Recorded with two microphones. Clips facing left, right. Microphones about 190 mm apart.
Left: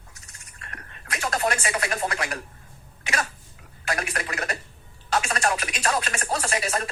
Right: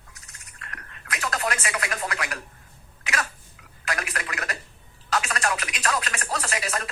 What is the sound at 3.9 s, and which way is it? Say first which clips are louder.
Speech: left 2 dB; 30° left (ahead or behind).